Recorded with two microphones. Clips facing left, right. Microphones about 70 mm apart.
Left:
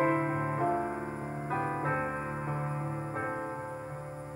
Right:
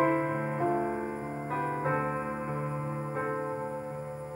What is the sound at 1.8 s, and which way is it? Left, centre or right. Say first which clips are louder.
Music: right 2 dB; centre.